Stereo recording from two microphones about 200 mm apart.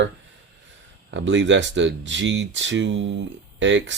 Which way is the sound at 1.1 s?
65° right (ahead or behind).